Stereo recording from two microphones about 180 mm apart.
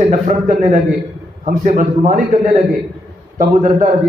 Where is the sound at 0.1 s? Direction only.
45° right (ahead or behind).